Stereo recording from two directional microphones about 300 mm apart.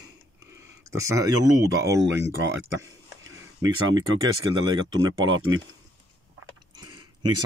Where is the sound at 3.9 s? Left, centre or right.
Centre.